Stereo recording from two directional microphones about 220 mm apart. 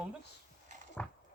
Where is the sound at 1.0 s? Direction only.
10° left (ahead or behind).